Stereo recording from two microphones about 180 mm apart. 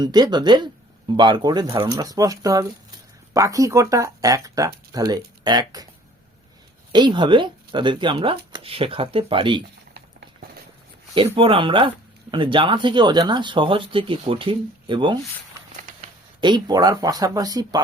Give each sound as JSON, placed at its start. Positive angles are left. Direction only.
{"t": 0.0, "sound": "speech", "side_deg": -25}
{"t": 6.9, "sound": "speech", "side_deg": -25}
{"t": 9.9, "sound": "patter", "side_deg": -65}
{"t": 11.3, "sound": "speech", "side_deg": -30}
{"t": 16.4, "sound": "speech", "side_deg": -25}